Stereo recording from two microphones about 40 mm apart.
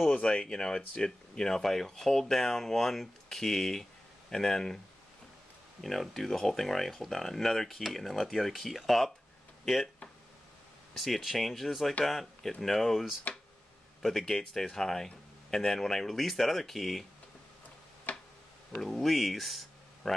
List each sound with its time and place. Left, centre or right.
0.2 s speech: left
5.8 s speech: centre
11.3 s speech: centre
18.1 s tick-tock: left
18.8 s speech: centre
20.1 s a man's voice: centre